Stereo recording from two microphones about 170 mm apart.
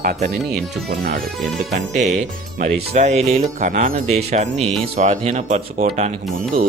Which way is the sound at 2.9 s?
40° right (ahead or behind).